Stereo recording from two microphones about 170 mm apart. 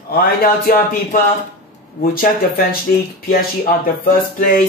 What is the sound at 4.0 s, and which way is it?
Music, 55° left (ahead or behind).